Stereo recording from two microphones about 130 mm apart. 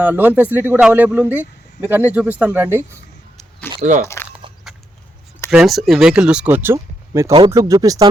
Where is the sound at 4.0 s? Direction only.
20° left (ahead or behind).